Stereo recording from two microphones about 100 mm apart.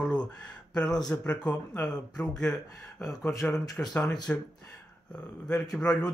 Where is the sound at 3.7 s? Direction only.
15° left (ahead or behind).